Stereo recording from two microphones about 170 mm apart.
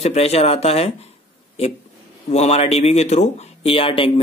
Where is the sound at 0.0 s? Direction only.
40° left (ahead or behind).